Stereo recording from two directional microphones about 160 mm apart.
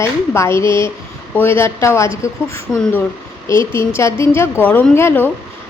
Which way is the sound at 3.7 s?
15° left (ahead or behind).